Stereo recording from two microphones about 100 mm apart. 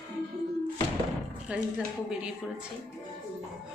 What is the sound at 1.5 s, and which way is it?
Speech, 15° right (ahead or behind).